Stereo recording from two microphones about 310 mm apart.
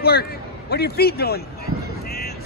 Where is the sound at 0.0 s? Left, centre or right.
Left.